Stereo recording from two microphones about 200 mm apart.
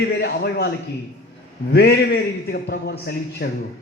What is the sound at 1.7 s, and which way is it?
A man's voice, 55° left (ahead or behind).